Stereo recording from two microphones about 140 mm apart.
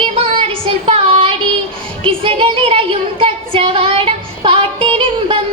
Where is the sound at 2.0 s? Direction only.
40° right (ahead or behind).